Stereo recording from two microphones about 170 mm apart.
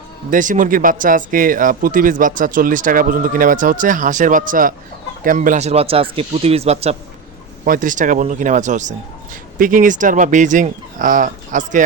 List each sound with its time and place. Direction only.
0.3 s speech: 50° right (ahead or behind)
7.6 s speech: 50° right (ahead or behind)